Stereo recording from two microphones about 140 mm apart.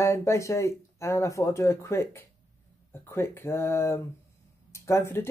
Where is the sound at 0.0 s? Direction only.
20° left (ahead or behind).